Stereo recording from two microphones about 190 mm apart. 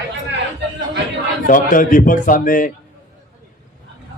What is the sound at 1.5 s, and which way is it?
A man's voice, 45° left (ahead or behind).